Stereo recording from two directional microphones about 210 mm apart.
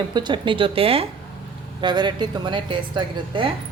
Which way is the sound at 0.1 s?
20° right (ahead or behind).